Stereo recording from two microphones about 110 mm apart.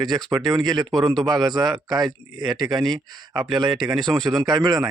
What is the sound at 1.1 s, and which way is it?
Speech, 5° left (ahead or behind).